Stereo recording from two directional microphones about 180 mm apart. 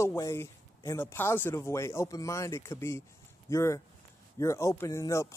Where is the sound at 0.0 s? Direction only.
15° left (ahead or behind).